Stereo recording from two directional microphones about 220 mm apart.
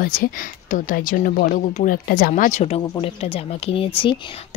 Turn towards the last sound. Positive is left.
turn(degrees=25)  # may be behind; listen again after turning